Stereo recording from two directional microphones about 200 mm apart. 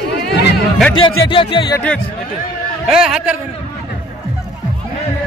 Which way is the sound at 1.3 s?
25° left (ahead or behind).